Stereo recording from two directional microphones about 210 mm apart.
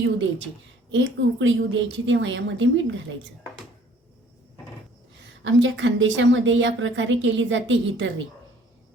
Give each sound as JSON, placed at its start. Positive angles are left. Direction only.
{"t": 0.0, "sound": "a woman's voice", "side_deg": -60}
{"t": 5.4, "sound": "a woman's voice", "side_deg": -65}